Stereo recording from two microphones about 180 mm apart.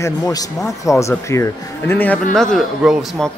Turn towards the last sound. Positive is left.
turn(degrees=0)  # may be behind; listen again after turning